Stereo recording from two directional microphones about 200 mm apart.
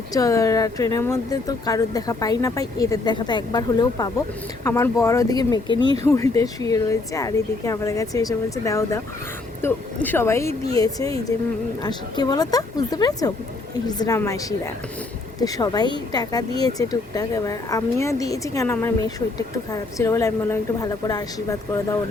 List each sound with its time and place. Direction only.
0.1 s a woman's voice: 15° left (ahead or behind)